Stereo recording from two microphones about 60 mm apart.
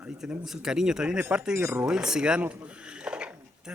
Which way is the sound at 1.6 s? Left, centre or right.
Right.